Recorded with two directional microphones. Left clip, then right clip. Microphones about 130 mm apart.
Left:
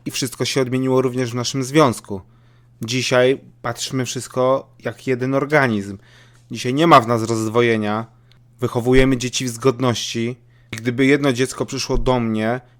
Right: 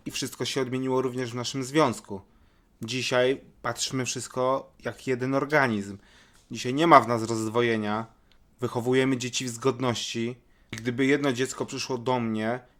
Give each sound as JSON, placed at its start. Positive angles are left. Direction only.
{"t": 0.0, "sound": "speech", "side_deg": 40}